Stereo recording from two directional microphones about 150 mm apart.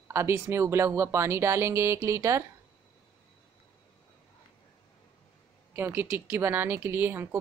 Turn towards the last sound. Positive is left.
turn(degrees=-15)  # may be behind; listen again after turning